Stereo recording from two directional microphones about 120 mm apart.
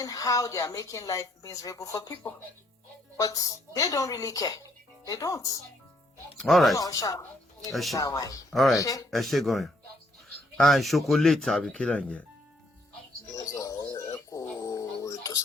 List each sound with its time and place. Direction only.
0.0 s speech: 30° left (ahead or behind)
3.2 s speech: 30° left (ahead or behind)
6.3 s speech: 5° left (ahead or behind)
6.7 s speech: 30° left (ahead or behind)
7.7 s speech: centre (ahead or behind)
7.9 s speech: 30° left (ahead or behind)
9.0 s speech: centre (ahead or behind)
13.3 s dog: 30° left (ahead or behind)